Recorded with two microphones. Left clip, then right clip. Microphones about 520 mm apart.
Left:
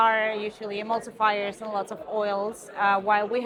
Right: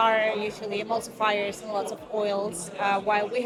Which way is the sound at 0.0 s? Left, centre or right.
Left.